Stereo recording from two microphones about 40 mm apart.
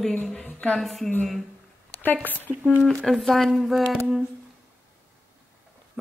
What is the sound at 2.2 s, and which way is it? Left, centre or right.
Speech, left.